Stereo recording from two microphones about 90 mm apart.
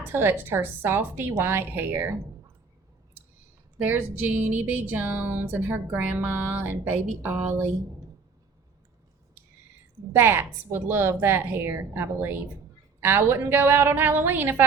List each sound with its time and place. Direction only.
0.0 s speech: 25° right (ahead or behind)
3.8 s speech: 20° right (ahead or behind)
10.1 s speech: 25° right (ahead or behind)